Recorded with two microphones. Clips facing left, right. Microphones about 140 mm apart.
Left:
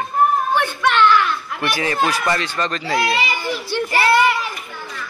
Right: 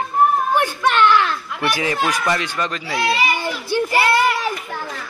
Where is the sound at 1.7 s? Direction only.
15° right (ahead or behind).